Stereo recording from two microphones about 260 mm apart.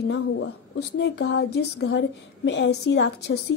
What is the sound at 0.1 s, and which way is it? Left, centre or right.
A woman's voice, left.